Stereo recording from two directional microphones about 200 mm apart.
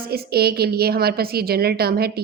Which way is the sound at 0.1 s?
50° right (ahead or behind).